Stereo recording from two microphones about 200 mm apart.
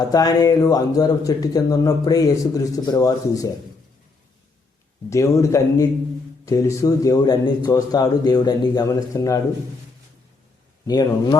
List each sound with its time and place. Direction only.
0.0 s speech: 20° left (ahead or behind)
5.0 s speech: 15° left (ahead or behind)
10.8 s speech: 20° left (ahead or behind)